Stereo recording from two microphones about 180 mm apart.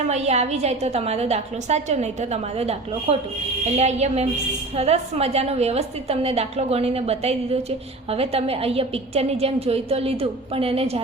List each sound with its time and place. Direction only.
0.1 s a woman's voice: 35° right (ahead or behind)